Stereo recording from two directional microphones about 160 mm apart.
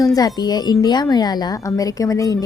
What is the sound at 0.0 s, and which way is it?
A woman's voice, 20° left (ahead or behind).